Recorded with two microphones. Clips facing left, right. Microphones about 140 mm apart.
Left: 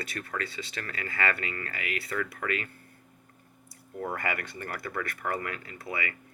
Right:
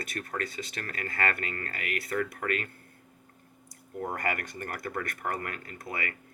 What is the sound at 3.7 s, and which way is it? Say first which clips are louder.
Speech: even; 40° right (ahead or behind).